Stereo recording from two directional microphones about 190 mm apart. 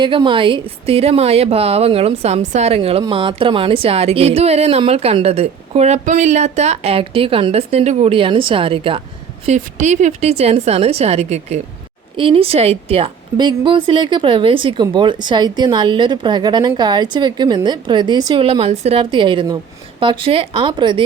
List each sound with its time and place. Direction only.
0.0 s a woman's voice: 25° right (ahead or behind)